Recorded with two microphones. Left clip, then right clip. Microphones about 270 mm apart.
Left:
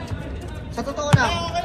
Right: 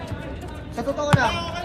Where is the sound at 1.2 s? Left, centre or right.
Left.